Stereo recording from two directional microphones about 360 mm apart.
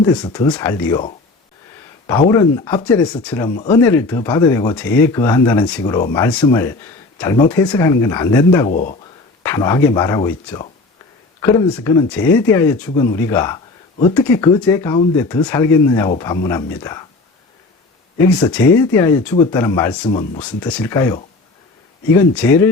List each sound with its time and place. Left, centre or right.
0.0 s speech: centre
2.3 s speech: centre
8.7 s speech: left
9.4 s speech: centre
18.3 s speech: centre